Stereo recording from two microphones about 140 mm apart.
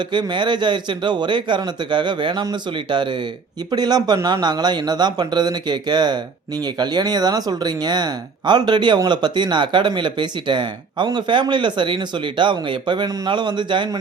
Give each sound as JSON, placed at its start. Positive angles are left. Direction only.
{"t": 0.1, "sound": "speech", "side_deg": -35}